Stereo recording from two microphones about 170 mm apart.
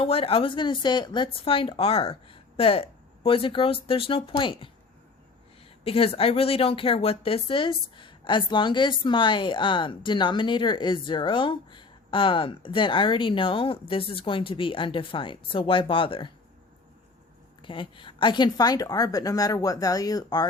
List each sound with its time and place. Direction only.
0.0 s speech: 35° left (ahead or behind)
5.8 s speech: 35° left (ahead or behind)
17.6 s speech: 30° left (ahead or behind)